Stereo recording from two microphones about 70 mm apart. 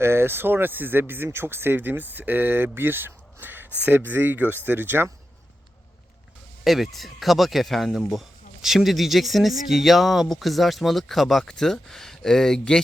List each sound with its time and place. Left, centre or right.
0.0 s speech: right
6.7 s speech: centre